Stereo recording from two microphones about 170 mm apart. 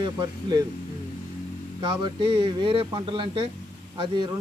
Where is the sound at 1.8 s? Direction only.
30° right (ahead or behind).